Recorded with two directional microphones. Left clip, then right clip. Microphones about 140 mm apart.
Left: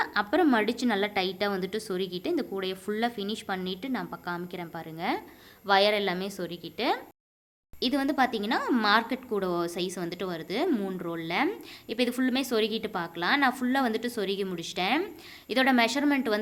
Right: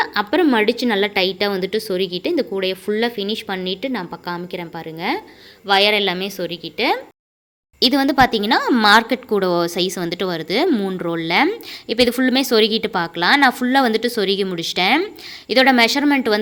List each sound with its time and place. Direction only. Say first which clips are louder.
0.0 s a woman's voice: right 8 dB; 10° right (ahead or behind)
7.8 s a woman's voice: right 12 dB; 40° right (ahead or behind)